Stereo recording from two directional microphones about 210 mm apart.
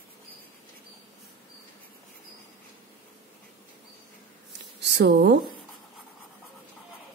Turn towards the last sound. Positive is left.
turn(degrees=-55)  # may be behind; listen again after turning